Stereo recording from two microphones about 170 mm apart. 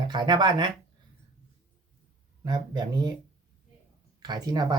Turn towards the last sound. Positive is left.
turn(degrees=-25)  # may be behind; listen again after turning